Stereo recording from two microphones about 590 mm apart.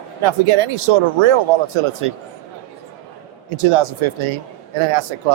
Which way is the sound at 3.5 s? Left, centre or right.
Right.